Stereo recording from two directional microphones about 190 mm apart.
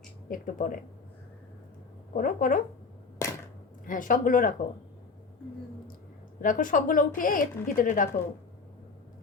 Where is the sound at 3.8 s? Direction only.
45° left (ahead or behind).